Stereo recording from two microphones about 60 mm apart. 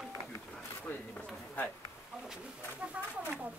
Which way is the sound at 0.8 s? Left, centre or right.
Left.